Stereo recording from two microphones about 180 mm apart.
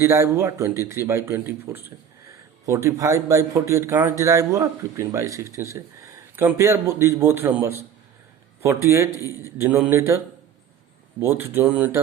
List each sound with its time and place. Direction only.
0.0 s speech: 15° right (ahead or behind)
11.2 s speech: 15° right (ahead or behind)